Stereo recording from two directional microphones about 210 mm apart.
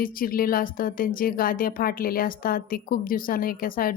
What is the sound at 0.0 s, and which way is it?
A woman's voice, 40° left (ahead or behind).